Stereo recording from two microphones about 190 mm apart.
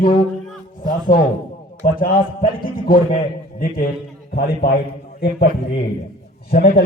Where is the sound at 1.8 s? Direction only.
50° left (ahead or behind).